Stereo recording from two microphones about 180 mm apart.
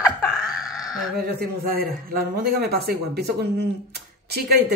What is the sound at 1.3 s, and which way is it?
A man's voice, 55° right (ahead or behind).